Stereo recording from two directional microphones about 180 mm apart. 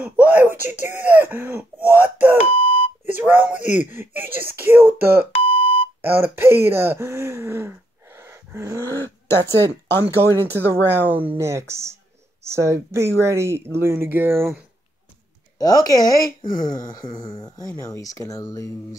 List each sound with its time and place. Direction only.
0.0 s speech: 10° right (ahead or behind)
2.5 s alarm clock: 30° left (ahead or behind)
3.2 s speech: 10° right (ahead or behind)
5.2 s alarm clock: 30° left (ahead or behind)
6.0 s speech: 10° right (ahead or behind)
8.2 s dog: 15° right (ahead or behind)
8.9 s speech: 15° left (ahead or behind)
10.7 s speech: 10° right (ahead or behind)
15.6 s speech: 20° left (ahead or behind)